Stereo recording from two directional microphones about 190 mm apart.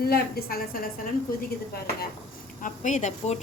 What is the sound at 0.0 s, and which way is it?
Speech, 55° left (ahead or behind).